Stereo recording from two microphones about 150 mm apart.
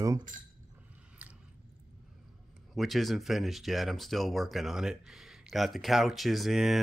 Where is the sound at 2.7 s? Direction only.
Centre (ahead or behind).